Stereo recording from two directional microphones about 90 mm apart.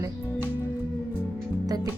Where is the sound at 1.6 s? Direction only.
45° right (ahead or behind).